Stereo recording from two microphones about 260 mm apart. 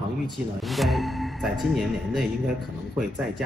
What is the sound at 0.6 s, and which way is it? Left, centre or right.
Speech, centre.